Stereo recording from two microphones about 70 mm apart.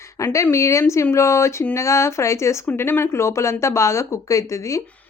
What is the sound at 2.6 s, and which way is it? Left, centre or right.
Speech, left.